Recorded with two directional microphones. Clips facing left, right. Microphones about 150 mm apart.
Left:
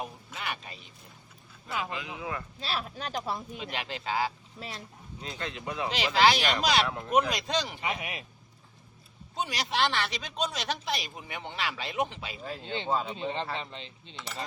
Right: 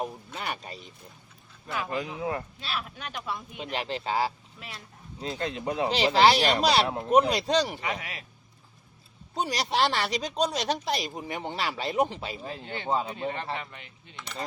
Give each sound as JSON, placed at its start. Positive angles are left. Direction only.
{"t": 0.3, "sound": "speech", "side_deg": -40}
{"t": 2.1, "sound": "speech", "side_deg": -35}
{"t": 2.6, "sound": "speech", "side_deg": 35}
{"t": 3.6, "sound": "speech", "side_deg": -35}
{"t": 4.6, "sound": "speech", "side_deg": 35}
{"t": 5.2, "sound": "speech", "side_deg": -35}
{"t": 7.8, "sound": "speech", "side_deg": 20}
{"t": 9.3, "sound": "speech", "side_deg": -35}
{"t": 12.4, "sound": "speech", "side_deg": -20}
{"t": 12.6, "sound": "speech", "side_deg": 20}
{"t": 12.9, "sound": "speech", "side_deg": -20}
{"t": 13.1, "sound": "speech", "side_deg": 20}